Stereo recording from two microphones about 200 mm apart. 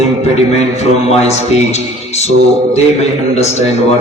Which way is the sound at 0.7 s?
30° left (ahead or behind).